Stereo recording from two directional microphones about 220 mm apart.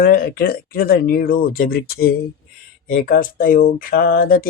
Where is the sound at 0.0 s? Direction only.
40° left (ahead or behind).